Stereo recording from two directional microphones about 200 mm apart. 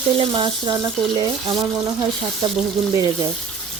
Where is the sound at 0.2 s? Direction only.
25° right (ahead or behind).